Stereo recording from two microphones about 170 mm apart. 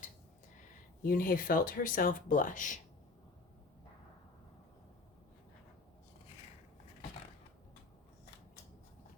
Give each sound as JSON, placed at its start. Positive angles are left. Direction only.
{"t": 1.0, "sound": "speech", "side_deg": 55}